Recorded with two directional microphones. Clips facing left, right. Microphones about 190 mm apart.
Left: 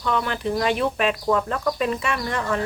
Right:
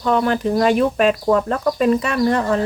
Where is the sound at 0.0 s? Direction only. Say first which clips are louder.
Right 7 dB; 40° right (ahead or behind).